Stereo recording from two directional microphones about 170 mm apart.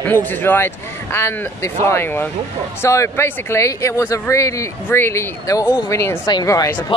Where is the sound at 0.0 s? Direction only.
10° left (ahead or behind).